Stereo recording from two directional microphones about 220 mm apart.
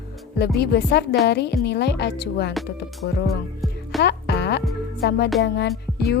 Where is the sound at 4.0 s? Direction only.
50° left (ahead or behind).